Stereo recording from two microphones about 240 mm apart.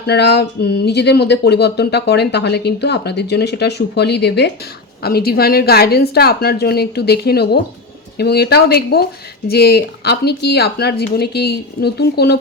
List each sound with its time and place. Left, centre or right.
0.0 s speech: left